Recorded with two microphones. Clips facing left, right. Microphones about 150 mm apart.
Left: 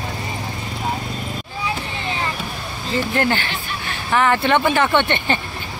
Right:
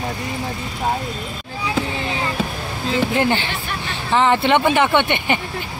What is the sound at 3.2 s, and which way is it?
Speech, 20° right (ahead or behind).